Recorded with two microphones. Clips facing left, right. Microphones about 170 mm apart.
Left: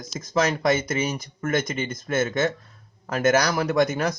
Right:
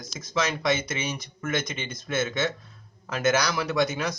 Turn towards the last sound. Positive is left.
turn(degrees=55)  # may be behind; listen again after turning